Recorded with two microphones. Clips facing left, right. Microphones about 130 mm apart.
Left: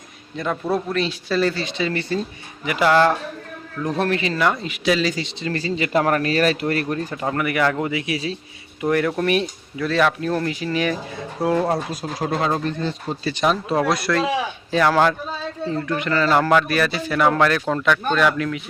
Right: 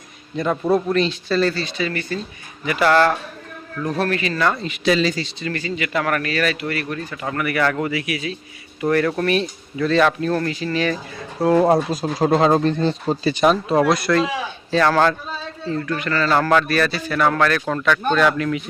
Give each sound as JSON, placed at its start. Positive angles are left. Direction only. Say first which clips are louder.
{"t": 0.3, "sound": "a man's voice", "louder": "right 4 dB", "side_deg": -5}
{"t": 2.6, "sound": "speech", "louder": "even", "side_deg": 15}
{"t": 5.2, "sound": "speech", "louder": "left 1 dB", "side_deg": 25}
{"t": 8.8, "sound": "speech", "louder": "right 1 dB", "side_deg": 15}
{"t": 9.7, "sound": "speech", "louder": "right 3 dB", "side_deg": 5}
{"t": 11.7, "sound": "speech", "louder": "right 6 dB", "side_deg": -25}
{"t": 13.3, "sound": "speech", "louder": "right 3 dB", "side_deg": 0}
{"t": 14.7, "sound": "speech", "louder": "right 1 dB", "side_deg": 10}